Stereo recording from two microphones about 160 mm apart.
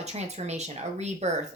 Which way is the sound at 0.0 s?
45° right (ahead or behind).